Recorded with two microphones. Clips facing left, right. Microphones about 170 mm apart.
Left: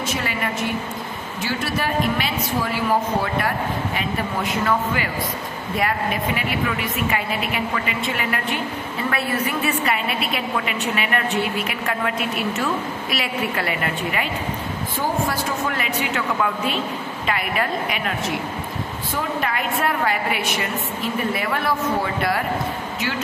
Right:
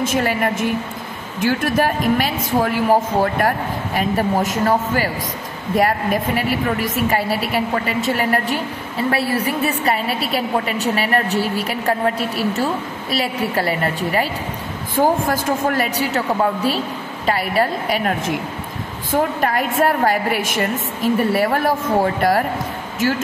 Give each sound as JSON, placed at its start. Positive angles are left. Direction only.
{"t": 0.0, "sound": "a woman's voice", "side_deg": -45}
{"t": 15.0, "sound": "a woman's voice", "side_deg": -50}